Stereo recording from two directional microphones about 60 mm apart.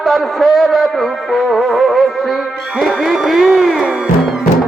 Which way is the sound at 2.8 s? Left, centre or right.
Centre.